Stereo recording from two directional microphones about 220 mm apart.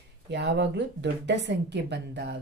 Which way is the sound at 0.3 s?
50° right (ahead or behind).